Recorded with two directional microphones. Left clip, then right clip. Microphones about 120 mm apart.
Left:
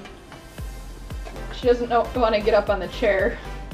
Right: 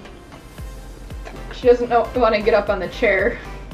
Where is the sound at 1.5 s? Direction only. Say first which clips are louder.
Right 5 dB; 25° left (ahead or behind).